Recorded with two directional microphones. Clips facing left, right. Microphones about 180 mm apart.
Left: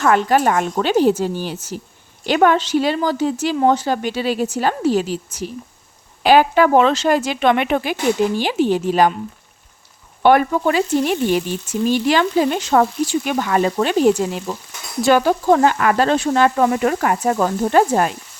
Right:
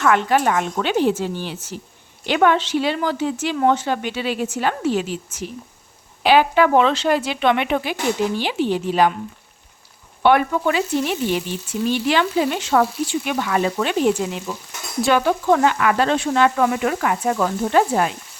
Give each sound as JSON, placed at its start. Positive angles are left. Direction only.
{"t": 0.0, "sound": "speech", "side_deg": 40}
{"t": 10.2, "sound": "speech", "side_deg": 40}